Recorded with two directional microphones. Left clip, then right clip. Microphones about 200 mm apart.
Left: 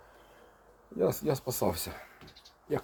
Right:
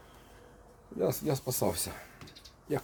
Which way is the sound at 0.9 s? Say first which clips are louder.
Left 2 dB; 5° left (ahead or behind).